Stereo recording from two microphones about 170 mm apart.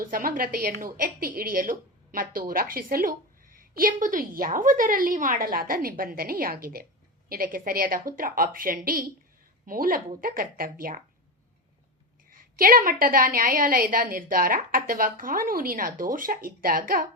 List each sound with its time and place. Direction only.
0.0 s a woman's voice: 55° right (ahead or behind)
12.3 s a woman's voice: 55° right (ahead or behind)